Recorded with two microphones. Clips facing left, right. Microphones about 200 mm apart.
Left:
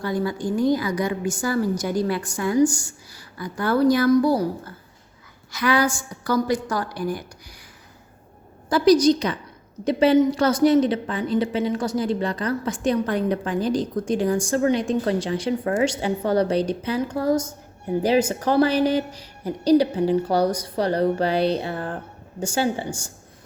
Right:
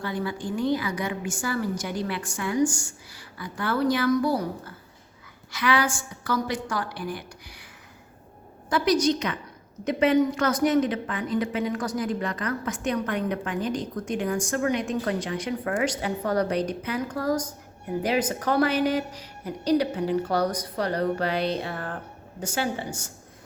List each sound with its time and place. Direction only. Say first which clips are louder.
0.0 s a woman's voice: left 5 dB; 40° left (ahead or behind)
8.7 s a woman's voice: left 6 dB; 35° left (ahead or behind)